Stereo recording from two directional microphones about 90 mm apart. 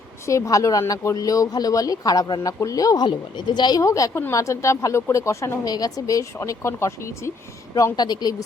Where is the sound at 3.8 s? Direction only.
40° left (ahead or behind).